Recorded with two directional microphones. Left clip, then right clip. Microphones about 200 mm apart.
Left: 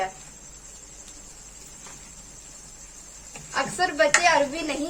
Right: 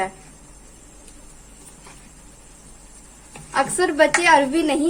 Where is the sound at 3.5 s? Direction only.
60° right (ahead or behind).